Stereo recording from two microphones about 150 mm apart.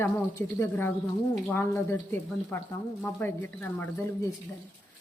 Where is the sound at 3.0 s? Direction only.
15° left (ahead or behind).